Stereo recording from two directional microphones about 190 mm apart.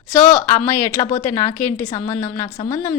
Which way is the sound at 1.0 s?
25° left (ahead or behind).